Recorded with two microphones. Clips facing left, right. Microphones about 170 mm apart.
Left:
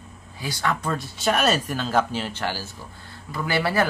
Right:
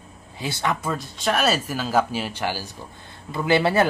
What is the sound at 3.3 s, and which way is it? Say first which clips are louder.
Speech: right 4 dB; 20° right (ahead or behind).